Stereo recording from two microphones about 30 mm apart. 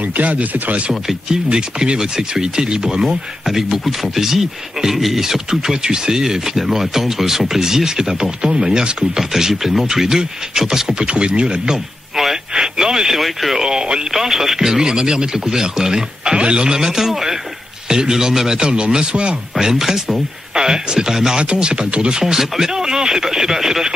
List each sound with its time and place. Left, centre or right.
0.2 s speech: right
1.3 s speech: right
3.4 s speech: centre; by 9.2 s right
9.3 s speech: centre
11.0 s speech: right
12.5 s radio: right
13.1 s speech: centre
13.6 s speech: right
14.1 s speech: centre; by 16.7 s right
16.7 s a man's voice: centre
19.6 s speech: centre
20.5 s speech: right
21.4 s speech: right
22.2 s speech: centre